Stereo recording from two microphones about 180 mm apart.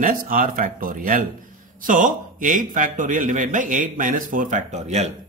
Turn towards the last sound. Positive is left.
turn(degrees=-40)  # may be behind; listen again after turning